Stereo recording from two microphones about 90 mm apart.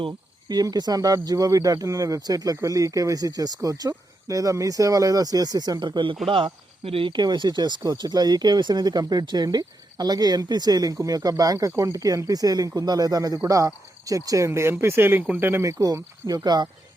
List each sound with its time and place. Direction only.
0.4 s speech: 45° right (ahead or behind); by 6.1 s 60° right (ahead or behind)
6.2 s speech: 80° right; by 15.7 s 25° right (ahead or behind)
16.2 s speech: 45° right (ahead or behind)